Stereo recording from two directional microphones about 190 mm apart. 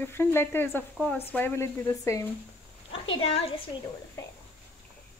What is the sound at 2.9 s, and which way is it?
Speech, 30° left (ahead or behind).